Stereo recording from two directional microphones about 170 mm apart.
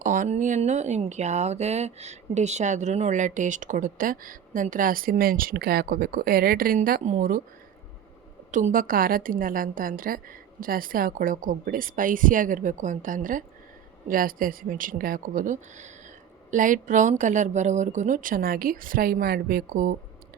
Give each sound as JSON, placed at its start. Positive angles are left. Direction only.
{"t": 0.0, "sound": "speech", "side_deg": -50}
{"t": 8.4, "sound": "speech", "side_deg": -50}